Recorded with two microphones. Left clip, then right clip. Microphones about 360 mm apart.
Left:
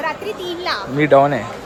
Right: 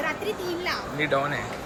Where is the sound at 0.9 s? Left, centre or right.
Centre.